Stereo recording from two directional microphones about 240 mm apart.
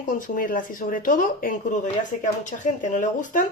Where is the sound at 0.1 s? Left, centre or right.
Left.